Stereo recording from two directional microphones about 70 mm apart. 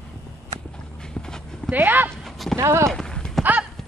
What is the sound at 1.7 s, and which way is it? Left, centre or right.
Speech, right.